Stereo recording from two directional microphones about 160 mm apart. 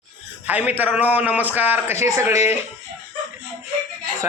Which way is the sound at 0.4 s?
10° right (ahead or behind).